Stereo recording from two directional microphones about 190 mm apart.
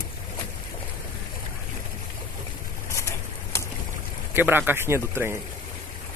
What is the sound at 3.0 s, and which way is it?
Pigeon, 15° left (ahead or behind).